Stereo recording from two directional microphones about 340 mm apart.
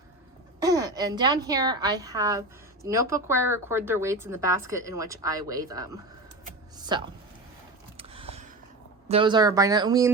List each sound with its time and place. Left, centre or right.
0.6 s a woman's voice: centre
7.9 s a sound: centre
9.0 s a woman's voice: centre